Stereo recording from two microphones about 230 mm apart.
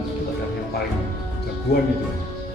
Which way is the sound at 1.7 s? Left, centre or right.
Left.